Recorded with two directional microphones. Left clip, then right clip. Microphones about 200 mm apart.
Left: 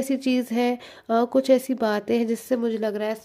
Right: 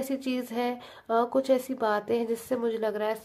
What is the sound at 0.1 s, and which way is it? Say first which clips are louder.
Speech: left 7 dB; 35° left (ahead or behind).